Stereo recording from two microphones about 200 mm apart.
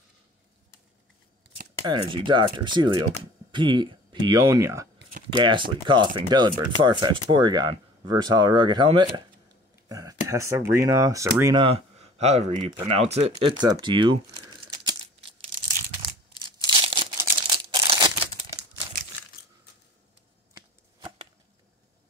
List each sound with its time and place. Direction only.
1.9 s speech: 25° right (ahead or behind)
11.6 s speech: 30° right (ahead or behind)
16.6 s a sound: 25° right (ahead or behind)
17.7 s crumpling: 20° right (ahead or behind)
20.5 s chopping: 25° right (ahead or behind)